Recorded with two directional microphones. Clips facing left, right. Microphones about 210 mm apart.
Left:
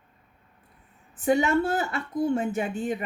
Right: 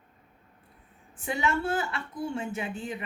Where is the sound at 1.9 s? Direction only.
45° left (ahead or behind).